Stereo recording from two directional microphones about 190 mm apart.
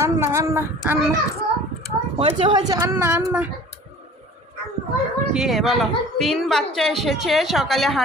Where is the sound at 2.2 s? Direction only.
30° right (ahead or behind).